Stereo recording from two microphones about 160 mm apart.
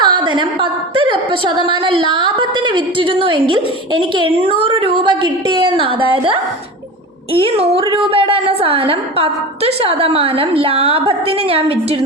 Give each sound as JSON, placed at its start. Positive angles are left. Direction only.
{"t": 0.0, "sound": "a woman's voice", "side_deg": -30}